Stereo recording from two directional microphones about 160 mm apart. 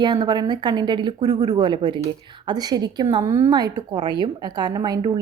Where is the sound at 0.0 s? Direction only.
25° right (ahead or behind).